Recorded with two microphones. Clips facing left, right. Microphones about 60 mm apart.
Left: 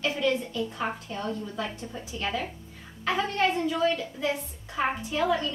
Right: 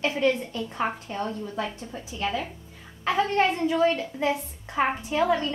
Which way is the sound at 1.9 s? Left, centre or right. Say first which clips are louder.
Right 3 dB; centre.